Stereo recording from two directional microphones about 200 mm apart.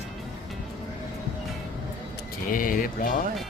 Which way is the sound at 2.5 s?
40° left (ahead or behind).